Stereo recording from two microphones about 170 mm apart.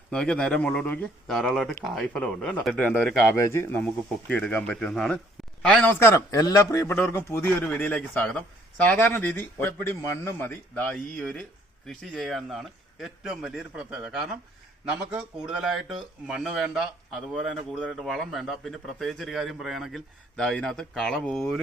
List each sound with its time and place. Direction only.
0.1 s a man's voice: 5° left (ahead or behind)